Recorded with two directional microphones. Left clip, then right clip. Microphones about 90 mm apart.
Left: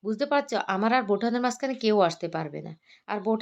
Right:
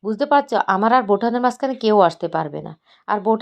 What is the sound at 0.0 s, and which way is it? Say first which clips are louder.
Speech: right 9 dB; 40° right (ahead or behind).